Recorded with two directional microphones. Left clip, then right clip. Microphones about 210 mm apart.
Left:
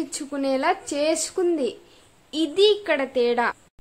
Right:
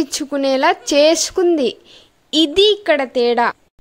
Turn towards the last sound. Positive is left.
turn(degrees=-35)  # may be behind; listen again after turning